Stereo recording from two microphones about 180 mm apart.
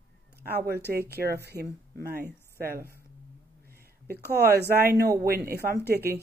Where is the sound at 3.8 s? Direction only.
60° right (ahead or behind).